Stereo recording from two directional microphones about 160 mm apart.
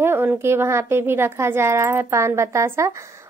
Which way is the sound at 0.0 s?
15° right (ahead or behind).